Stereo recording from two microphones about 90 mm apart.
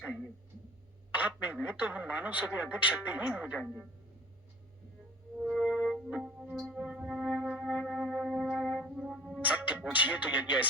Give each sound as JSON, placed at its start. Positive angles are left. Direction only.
{"t": 1.1, "sound": "a man's voice", "side_deg": -15}
{"t": 5.5, "sound": "music", "side_deg": -15}
{"t": 9.5, "sound": "music", "side_deg": -15}